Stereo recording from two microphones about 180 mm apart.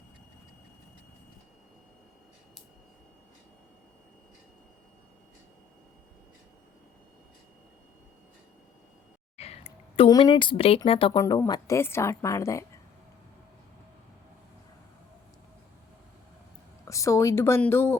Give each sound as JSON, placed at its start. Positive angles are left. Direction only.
{"t": 9.4, "sound": "a sound", "side_deg": 35}
{"t": 10.8, "sound": "a woman's voice", "side_deg": 30}
{"t": 16.8, "sound": "a woman's voice", "side_deg": 15}